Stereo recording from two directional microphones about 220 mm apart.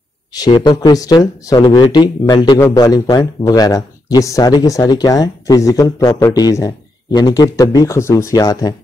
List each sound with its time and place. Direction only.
0.3 s speech: 20° left (ahead or behind)